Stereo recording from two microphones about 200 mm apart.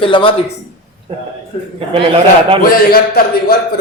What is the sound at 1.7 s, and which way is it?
Speech, 25° right (ahead or behind).